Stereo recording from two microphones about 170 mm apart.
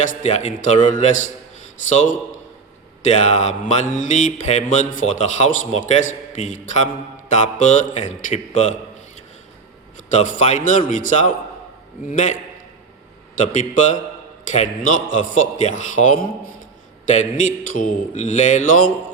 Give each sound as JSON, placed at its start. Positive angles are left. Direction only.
{"t": 0.0, "sound": "mantra", "side_deg": 45}
{"t": 10.1, "sound": "mantra", "side_deg": 50}